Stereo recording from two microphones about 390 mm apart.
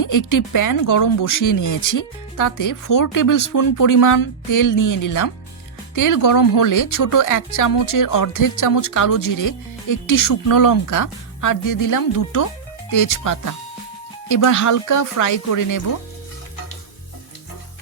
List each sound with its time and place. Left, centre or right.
0.0 s speech: left